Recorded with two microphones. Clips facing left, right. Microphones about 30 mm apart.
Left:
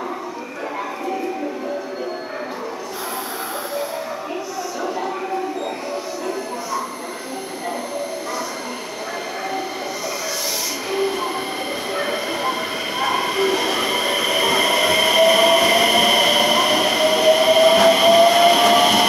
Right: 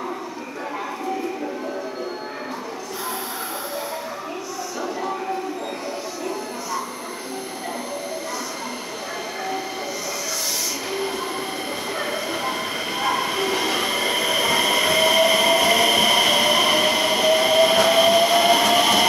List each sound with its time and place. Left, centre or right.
10.9 s train: centre
12.0 s train: centre
13.0 s train: centre